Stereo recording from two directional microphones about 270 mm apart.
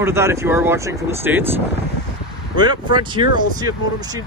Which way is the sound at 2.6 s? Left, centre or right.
Centre.